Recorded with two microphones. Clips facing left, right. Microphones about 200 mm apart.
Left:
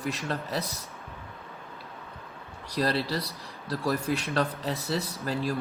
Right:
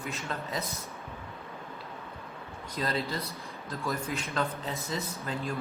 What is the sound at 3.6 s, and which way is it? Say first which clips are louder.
Speech: left 6 dB; 35° left (ahead or behind).